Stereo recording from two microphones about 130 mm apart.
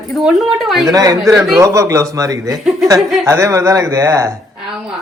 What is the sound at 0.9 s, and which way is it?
Speech, 30° right (ahead or behind).